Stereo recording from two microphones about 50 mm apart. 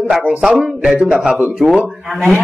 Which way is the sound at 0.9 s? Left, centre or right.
Right.